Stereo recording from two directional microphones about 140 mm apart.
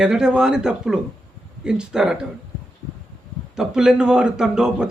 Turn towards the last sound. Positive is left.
turn(degrees=-5)  # may be behind; listen again after turning